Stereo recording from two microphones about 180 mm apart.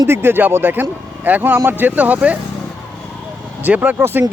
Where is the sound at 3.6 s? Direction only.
5° right (ahead or behind).